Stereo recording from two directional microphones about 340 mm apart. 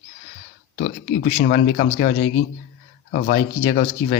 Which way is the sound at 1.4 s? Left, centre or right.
Left.